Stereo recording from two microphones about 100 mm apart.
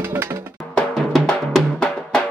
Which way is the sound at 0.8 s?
5° left (ahead or behind).